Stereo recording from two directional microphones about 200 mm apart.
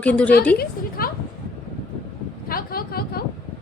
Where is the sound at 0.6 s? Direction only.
45° left (ahead or behind).